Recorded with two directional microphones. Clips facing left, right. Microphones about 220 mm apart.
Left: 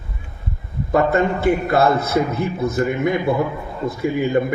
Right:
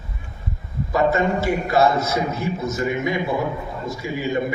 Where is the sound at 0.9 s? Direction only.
55° left (ahead or behind).